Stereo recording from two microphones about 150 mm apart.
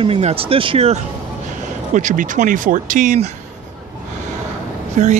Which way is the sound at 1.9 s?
55° right (ahead or behind).